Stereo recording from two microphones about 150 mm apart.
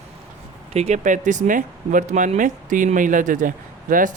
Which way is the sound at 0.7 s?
45° right (ahead or behind).